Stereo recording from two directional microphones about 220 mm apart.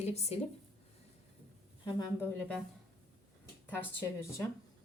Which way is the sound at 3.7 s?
10° left (ahead or behind).